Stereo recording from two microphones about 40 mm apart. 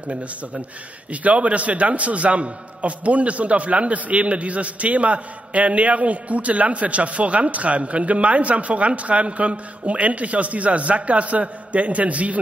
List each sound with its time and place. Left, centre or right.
1.1 s a man's voice: right